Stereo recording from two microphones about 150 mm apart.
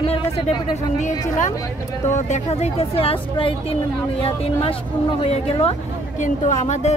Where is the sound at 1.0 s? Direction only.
55° left (ahead or behind).